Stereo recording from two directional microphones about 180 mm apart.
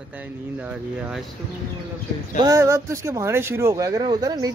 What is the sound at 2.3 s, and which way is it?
Speech, 20° right (ahead or behind).